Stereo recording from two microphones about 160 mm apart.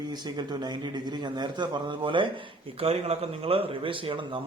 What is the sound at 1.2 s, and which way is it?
A man's voice, 25° right (ahead or behind).